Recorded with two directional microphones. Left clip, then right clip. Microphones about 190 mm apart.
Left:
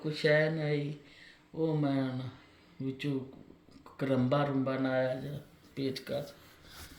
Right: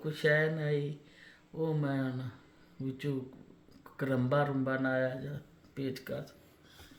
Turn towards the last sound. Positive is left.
turn(degrees=-45)  # may be behind; listen again after turning